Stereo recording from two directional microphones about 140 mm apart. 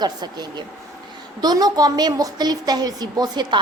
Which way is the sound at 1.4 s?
30° right (ahead or behind).